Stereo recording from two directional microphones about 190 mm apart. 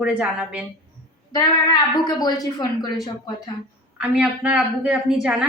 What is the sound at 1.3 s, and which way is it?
A woman's voice, 20° left (ahead or behind).